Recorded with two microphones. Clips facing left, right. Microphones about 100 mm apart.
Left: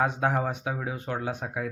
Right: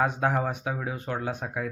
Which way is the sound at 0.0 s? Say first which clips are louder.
Even; 20° left (ahead or behind).